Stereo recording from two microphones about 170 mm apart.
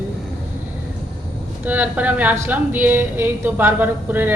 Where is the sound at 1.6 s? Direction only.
10° right (ahead or behind).